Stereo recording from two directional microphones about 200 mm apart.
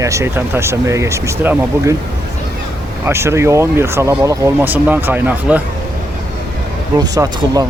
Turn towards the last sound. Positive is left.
turn(degrees=-20)  # may be behind; listen again after turning